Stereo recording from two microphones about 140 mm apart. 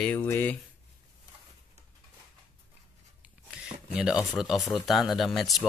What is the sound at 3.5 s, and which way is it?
Speech, 5° right (ahead or behind).